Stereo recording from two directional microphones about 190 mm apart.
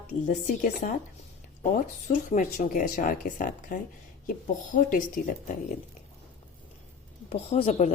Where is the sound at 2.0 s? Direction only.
40° left (ahead or behind).